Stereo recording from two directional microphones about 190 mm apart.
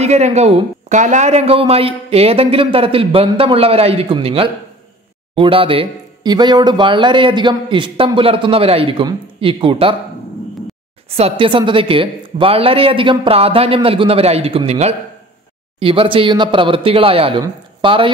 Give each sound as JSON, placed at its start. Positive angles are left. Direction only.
{"t": 0.0, "sound": "speech", "side_deg": -35}
{"t": 11.1, "sound": "speech", "side_deg": -30}